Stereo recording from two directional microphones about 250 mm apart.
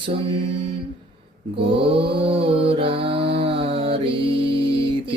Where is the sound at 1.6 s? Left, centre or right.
Right.